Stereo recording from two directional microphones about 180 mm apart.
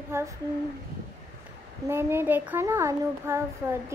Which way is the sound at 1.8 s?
15° right (ahead or behind).